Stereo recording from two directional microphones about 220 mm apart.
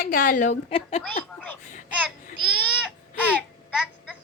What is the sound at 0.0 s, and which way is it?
A woman's voice, 40° left (ahead or behind).